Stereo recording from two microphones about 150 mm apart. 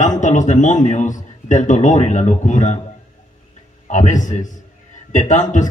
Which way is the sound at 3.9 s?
55° left (ahead or behind).